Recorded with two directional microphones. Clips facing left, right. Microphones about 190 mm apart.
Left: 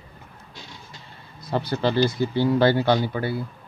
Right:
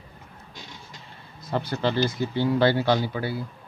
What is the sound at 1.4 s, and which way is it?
A man's voice, 35° left (ahead or behind).